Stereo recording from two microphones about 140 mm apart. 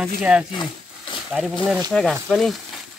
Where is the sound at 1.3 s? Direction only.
5° right (ahead or behind).